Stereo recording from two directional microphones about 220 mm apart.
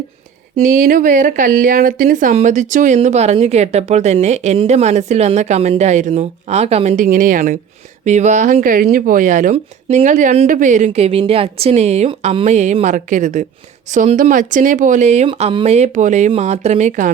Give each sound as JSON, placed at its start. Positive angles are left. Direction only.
{"t": 0.5, "sound": "a woman's voice", "side_deg": -40}